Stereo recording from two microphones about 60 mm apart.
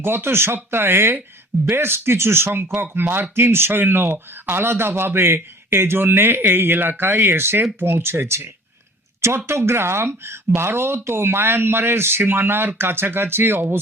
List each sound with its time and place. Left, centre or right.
0.0 s speech: right
9.5 s speech: right